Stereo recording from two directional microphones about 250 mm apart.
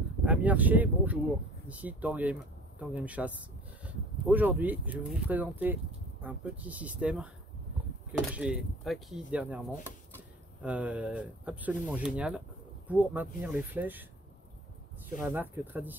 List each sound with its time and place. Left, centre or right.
0.2 s speech: centre
10.6 s speech: centre
15.2 s speech: centre